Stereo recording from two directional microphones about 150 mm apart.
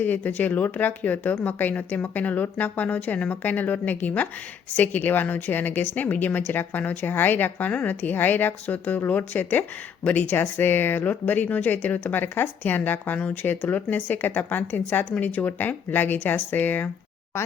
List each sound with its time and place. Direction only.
0.0 s a woman's voice: 10° left (ahead or behind)